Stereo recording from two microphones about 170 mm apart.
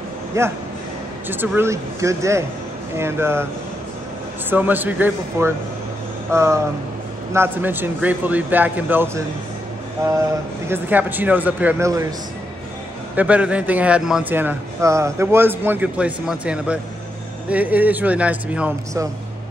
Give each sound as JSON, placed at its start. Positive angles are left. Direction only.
{"t": 0.3, "sound": "speech", "side_deg": -15}
{"t": 4.5, "sound": "speech", "side_deg": -10}
{"t": 10.7, "sound": "speech", "side_deg": -10}
{"t": 13.1, "sound": "speech", "side_deg": -10}